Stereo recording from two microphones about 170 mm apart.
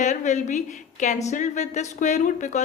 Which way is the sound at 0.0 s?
45° left (ahead or behind).